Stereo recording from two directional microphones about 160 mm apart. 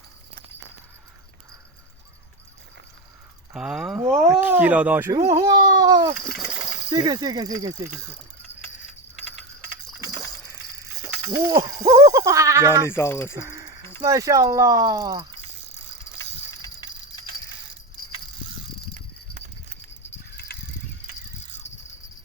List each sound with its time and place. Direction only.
3.5 s speech: 5° right (ahead or behind)
5.4 s a sound: 25° right (ahead or behind)
6.4 s a sound: 5° right (ahead or behind)
6.9 s speech: 25° right (ahead or behind)
11.3 s speech: 20° right (ahead or behind)
12.9 s speech: 15° left (ahead or behind)
13.3 s bird: 25° right (ahead or behind)
14.0 s speech: 20° right (ahead or behind)
16.6 s a sound: 30° left (ahead or behind)